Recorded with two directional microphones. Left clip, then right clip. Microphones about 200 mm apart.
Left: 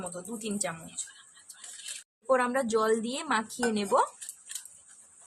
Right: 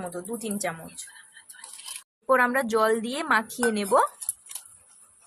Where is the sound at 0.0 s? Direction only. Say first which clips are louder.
Right 4 dB; 10° right (ahead or behind).